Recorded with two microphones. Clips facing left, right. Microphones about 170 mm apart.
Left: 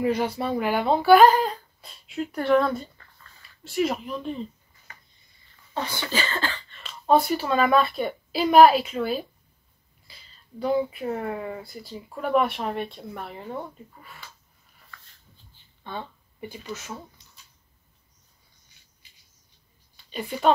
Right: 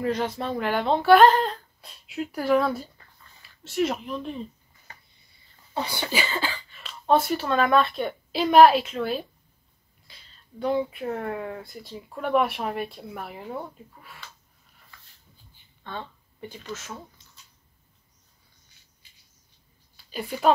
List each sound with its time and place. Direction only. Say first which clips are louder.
0.0 s speech: left 2 dB; 10° left (ahead or behind)
5.8 s speech: even; 15° right (ahead or behind)
15.8 s a sound: left 1 dB; 10° left (ahead or behind)
16.7 s speech: even; centre (ahead or behind)
20.1 s speech: even; centre (ahead or behind)